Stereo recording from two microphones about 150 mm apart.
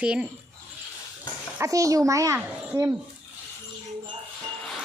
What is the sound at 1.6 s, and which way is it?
Speech, 20° right (ahead or behind).